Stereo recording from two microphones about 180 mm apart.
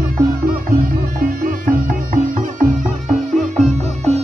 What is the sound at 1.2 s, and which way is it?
Music, 50° right (ahead or behind).